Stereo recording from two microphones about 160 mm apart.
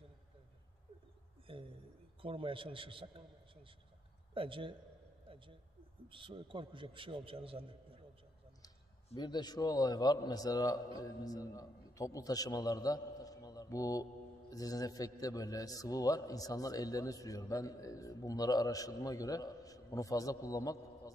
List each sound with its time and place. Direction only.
1.5 s a man's voice: 35° right (ahead or behind)
4.3 s a man's voice: 35° right (ahead or behind)
5.3 s a sound: 30° right (ahead or behind)
6.0 s a man's voice: 30° right (ahead or behind)
8.6 s a man's voice: 25° left (ahead or behind)